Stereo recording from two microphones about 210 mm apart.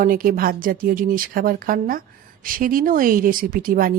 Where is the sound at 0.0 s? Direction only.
40° right (ahead or behind).